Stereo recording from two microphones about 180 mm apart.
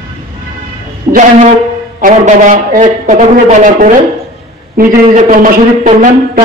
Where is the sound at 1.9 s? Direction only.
45° right (ahead or behind).